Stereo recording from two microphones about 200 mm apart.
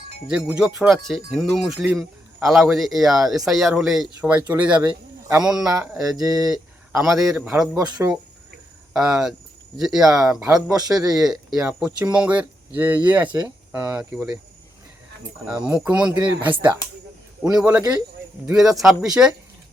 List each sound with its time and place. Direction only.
0.4 s speech: 5° right (ahead or behind)
6.2 s speech: 20° right (ahead or behind)
7.0 s speech: centre (ahead or behind)
8.9 s speech: centre (ahead or behind)
15.4 s speech: 5° right (ahead or behind)